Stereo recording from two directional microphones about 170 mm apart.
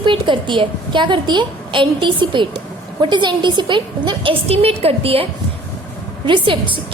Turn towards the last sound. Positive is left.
turn(degrees=-30)  # may be behind; listen again after turning